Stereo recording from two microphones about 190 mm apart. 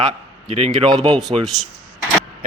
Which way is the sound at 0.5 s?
30° right (ahead or behind).